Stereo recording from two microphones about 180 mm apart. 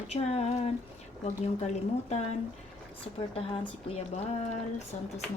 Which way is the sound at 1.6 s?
40° left (ahead or behind).